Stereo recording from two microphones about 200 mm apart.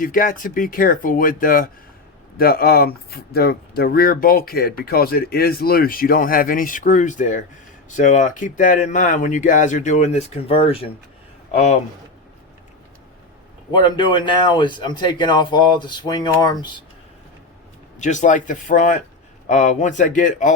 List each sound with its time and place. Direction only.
0.0 s speech: 45° left (ahead or behind)
13.7 s speech: 25° left (ahead or behind)
18.0 s speech: 35° left (ahead or behind)